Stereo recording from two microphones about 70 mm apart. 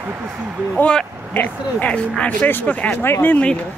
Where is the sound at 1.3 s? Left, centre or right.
Left.